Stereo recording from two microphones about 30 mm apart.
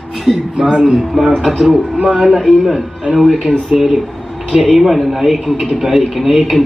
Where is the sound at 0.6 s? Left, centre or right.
Right.